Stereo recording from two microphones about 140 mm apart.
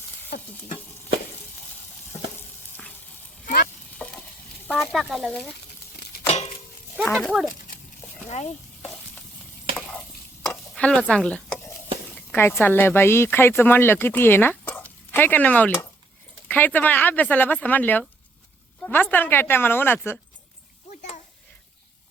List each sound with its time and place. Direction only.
3.4 s sizzle: 90° left
3.9 s stir: 5° left (ahead or behind)
4.8 s speech: centre (ahead or behind)
6.2 s a sound: 50° left (ahead or behind)
7.0 s speech: centre (ahead or behind)
10.5 s a sound: 10° left (ahead or behind)
12.6 s speech: 15° left (ahead or behind)